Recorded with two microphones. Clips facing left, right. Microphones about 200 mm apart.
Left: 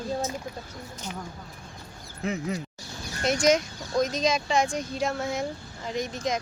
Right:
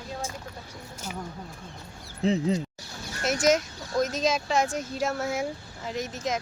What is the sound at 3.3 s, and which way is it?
Speech, 5° right (ahead or behind).